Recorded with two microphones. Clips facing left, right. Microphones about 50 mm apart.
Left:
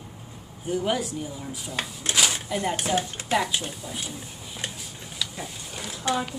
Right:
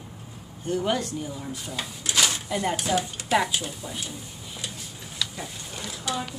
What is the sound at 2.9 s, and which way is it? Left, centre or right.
Speech, left.